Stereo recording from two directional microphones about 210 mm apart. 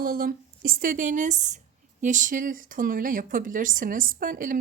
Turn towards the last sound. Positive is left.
turn(degrees=-40)  # may be behind; listen again after turning